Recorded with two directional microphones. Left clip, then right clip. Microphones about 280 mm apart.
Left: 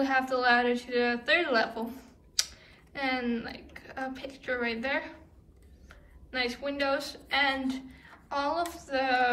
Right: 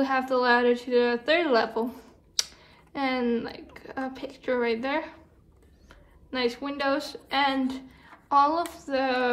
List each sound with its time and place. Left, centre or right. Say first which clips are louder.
0.0 s a woman's voice: right 2 dB; centre